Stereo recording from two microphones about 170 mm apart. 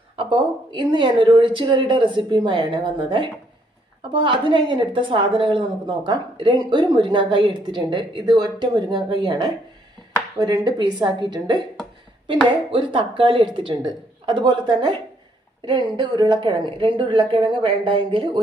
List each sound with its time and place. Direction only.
0.2 s speech: 30° right (ahead or behind)
12.7 s speech: 30° right (ahead or behind)